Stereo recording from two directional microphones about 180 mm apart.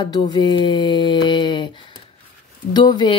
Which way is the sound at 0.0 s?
25° left (ahead or behind).